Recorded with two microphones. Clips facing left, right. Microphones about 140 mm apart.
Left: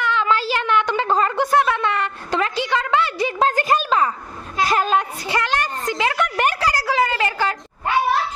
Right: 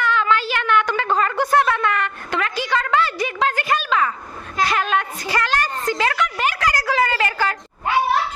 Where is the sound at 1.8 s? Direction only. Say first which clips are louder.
Even; 30° left (ahead or behind).